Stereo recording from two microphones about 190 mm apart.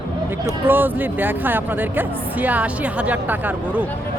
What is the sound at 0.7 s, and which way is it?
Speech, 10° right (ahead or behind).